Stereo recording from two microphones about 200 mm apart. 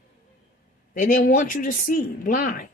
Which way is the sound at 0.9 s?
40° left (ahead or behind).